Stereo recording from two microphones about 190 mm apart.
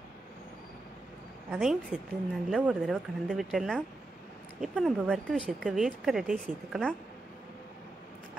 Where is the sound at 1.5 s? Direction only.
5° right (ahead or behind).